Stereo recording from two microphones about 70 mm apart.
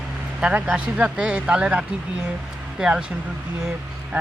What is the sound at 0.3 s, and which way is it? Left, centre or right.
Speech, centre.